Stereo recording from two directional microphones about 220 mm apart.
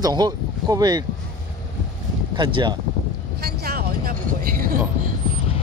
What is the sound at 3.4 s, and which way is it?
Speech, 45° right (ahead or behind).